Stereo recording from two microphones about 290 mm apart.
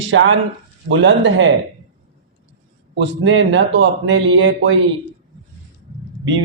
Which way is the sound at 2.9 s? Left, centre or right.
Right.